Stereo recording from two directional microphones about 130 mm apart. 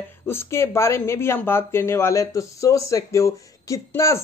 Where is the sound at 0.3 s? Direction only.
20° left (ahead or behind).